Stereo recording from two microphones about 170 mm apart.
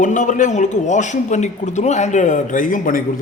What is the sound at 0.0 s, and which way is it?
A man's voice, 50° left (ahead or behind).